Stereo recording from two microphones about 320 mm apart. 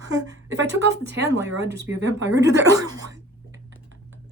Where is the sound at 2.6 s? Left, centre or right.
Centre.